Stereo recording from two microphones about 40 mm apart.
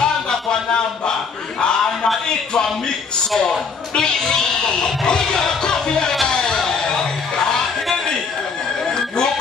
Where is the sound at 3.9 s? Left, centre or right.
Centre.